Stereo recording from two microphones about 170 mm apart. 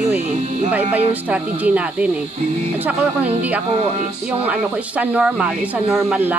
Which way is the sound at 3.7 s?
35° right (ahead or behind).